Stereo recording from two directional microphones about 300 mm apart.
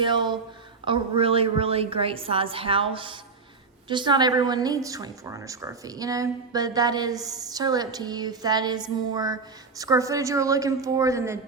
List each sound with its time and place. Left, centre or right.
0.0 s a woman's voice: centre